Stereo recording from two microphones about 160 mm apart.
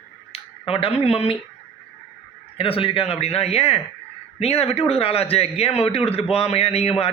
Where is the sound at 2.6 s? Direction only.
35° left (ahead or behind).